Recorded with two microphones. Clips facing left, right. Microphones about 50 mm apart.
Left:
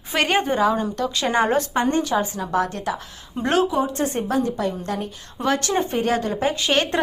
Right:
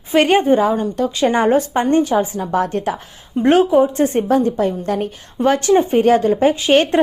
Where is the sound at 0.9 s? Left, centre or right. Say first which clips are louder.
Right 5 dB; centre.